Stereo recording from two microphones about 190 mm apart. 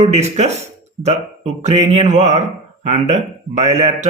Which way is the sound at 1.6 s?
35° right (ahead or behind).